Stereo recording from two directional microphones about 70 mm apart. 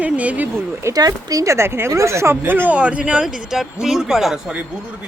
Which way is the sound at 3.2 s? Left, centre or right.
Centre.